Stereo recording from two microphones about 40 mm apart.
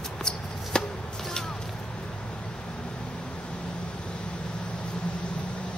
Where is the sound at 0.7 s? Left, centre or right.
Left.